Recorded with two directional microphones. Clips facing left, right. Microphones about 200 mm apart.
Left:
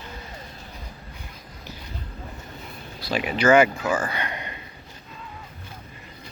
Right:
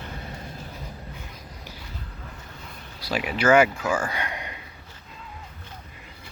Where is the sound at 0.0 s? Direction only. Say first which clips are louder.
Right 2 dB; 55° right (ahead or behind).